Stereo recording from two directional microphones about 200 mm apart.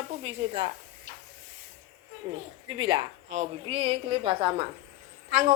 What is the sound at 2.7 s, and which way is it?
A woman's voice, 25° right (ahead or behind).